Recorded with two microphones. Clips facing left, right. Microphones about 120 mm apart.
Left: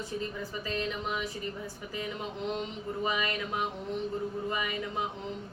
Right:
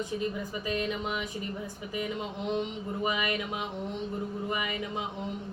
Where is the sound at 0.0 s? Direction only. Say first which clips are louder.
Right 3 dB; 15° right (ahead or behind).